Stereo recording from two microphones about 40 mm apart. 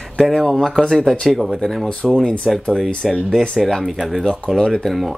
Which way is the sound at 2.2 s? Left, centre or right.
Centre.